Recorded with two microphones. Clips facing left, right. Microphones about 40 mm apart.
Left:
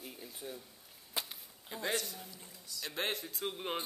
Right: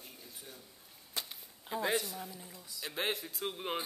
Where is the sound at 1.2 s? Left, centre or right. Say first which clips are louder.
Left 1 dB; centre.